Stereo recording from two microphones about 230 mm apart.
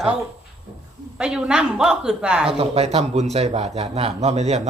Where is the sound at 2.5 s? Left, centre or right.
Right.